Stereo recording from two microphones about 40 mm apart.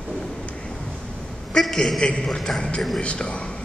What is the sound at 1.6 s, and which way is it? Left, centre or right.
A man's voice, centre.